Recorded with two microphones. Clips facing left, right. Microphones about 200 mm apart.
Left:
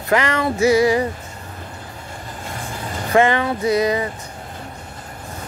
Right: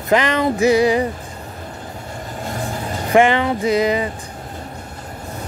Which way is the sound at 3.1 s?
15° right (ahead or behind).